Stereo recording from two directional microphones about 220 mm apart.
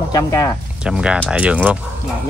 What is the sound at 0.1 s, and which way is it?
Speech, 15° left (ahead or behind).